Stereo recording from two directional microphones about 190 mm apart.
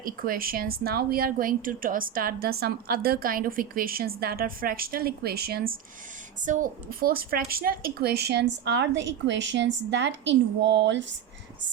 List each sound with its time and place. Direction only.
0.0 s a woman's voice: 50° right (ahead or behind)
6.4 s a woman's voice: 45° right (ahead or behind); by 11.2 s 70° right (ahead or behind)